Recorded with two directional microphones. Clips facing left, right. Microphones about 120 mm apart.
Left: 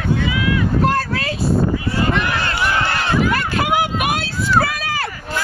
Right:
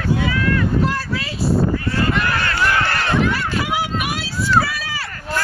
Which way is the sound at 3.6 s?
55° left (ahead or behind).